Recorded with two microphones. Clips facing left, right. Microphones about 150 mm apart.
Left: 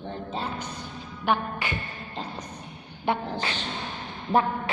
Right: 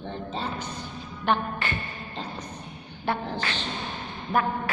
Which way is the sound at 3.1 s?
20° left (ahead or behind).